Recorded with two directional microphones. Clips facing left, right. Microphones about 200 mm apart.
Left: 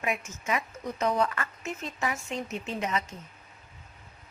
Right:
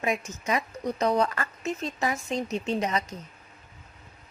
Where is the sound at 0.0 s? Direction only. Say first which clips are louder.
Right 3 dB; 35° right (ahead or behind).